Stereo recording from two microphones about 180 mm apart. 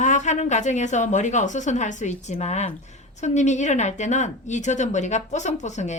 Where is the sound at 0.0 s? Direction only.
40° left (ahead or behind).